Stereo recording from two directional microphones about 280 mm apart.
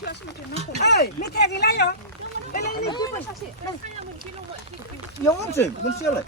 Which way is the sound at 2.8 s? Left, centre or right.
Centre.